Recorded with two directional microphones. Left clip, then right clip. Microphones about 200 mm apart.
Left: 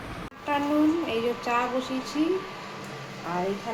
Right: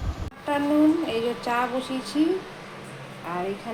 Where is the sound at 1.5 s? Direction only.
10° right (ahead or behind).